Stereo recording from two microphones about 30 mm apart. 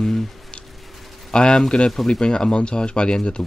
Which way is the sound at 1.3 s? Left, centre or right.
Left.